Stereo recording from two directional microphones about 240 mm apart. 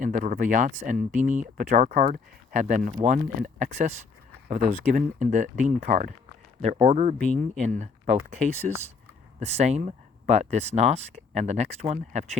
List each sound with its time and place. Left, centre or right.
0.0 s speech: right
9.4 s speech: right